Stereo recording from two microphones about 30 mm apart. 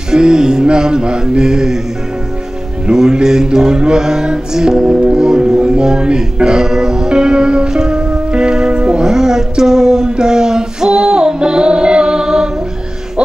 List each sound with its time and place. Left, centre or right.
0.1 s music: right
2.9 s music: right
9.0 s a sound: right